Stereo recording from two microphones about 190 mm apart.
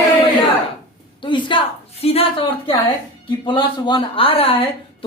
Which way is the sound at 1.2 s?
25° left (ahead or behind).